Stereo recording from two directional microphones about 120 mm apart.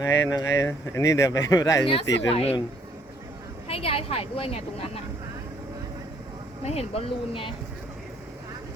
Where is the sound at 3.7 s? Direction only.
55° left (ahead or behind).